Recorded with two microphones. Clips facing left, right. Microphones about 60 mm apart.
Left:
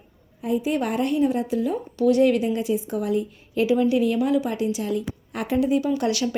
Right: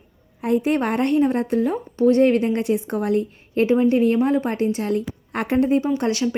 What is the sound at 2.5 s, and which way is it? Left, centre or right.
Speech, right.